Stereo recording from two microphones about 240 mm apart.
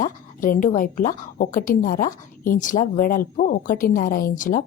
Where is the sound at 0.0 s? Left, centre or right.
Left.